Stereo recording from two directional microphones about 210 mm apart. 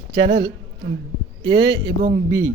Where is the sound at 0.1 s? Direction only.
25° right (ahead or behind).